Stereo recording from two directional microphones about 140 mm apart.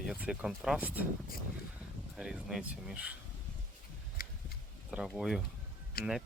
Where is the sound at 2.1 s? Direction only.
5° right (ahead or behind).